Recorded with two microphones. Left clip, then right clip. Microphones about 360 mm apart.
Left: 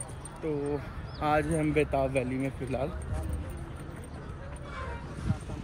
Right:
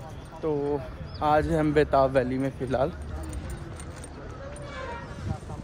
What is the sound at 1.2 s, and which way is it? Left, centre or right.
Speech, centre.